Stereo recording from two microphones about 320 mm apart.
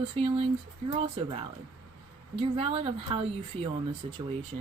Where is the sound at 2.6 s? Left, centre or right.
Centre.